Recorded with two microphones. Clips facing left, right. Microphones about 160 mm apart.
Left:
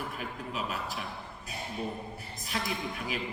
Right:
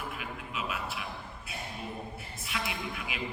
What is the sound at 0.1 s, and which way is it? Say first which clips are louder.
Music: left 2 dB; 40° left (ahead or behind).